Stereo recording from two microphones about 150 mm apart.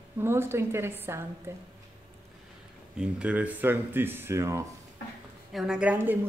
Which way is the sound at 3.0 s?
10° right (ahead or behind).